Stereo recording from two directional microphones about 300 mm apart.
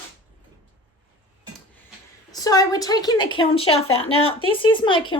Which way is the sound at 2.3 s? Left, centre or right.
Centre.